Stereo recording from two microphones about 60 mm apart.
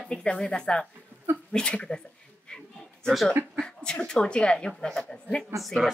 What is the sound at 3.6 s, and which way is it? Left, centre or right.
Speech, centre.